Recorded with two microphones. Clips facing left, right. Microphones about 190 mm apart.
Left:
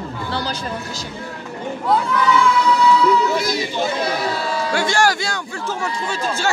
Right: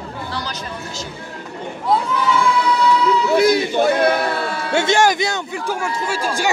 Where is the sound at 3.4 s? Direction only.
60° right (ahead or behind).